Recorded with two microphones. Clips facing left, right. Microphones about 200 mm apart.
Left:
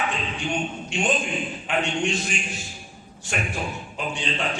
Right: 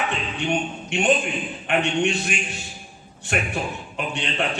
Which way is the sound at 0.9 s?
65° right (ahead or behind).